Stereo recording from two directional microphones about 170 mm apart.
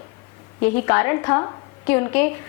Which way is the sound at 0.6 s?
10° left (ahead or behind).